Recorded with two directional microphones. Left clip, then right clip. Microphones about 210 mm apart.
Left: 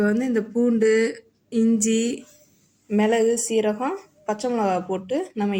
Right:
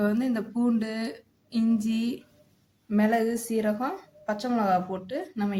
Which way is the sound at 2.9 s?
15° left (ahead or behind).